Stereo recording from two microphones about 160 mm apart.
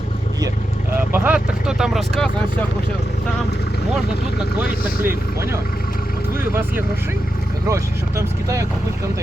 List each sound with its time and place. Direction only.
1.1 s speech: 10° right (ahead or behind)
5.0 s speech: 15° right (ahead or behind)